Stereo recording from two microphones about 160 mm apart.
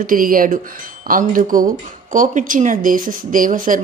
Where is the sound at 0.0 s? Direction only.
60° right (ahead or behind).